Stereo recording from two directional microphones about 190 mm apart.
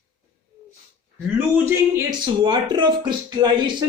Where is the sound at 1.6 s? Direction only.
15° right (ahead or behind).